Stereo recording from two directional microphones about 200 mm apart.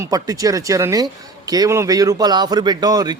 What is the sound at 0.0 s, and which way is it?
Speech, 20° right (ahead or behind).